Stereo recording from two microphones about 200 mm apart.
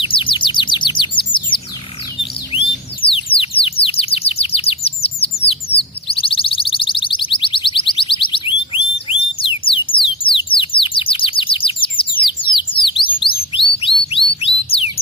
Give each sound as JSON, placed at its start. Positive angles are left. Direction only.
{"t": 0.0, "sound": "chirp", "side_deg": 25}
{"t": 2.5, "sound": "bird", "side_deg": 25}
{"t": 3.3, "sound": "chirp", "side_deg": 30}
{"t": 6.1, "sound": "alarm", "side_deg": 25}
{"t": 10.3, "sound": "bird", "side_deg": 25}